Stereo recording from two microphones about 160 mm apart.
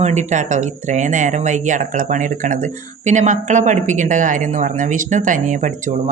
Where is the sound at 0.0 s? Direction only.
45° right (ahead or behind).